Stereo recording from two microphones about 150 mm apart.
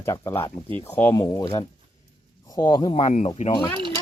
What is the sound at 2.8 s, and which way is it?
Speech, 40° left (ahead or behind).